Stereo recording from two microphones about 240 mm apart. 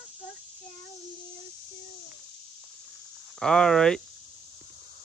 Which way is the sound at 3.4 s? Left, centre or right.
Centre.